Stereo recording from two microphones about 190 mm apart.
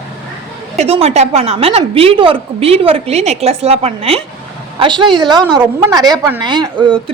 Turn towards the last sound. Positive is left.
turn(degrees=-25)  # may be behind; listen again after turning